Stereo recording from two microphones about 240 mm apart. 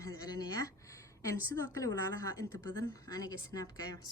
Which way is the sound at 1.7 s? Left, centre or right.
Centre.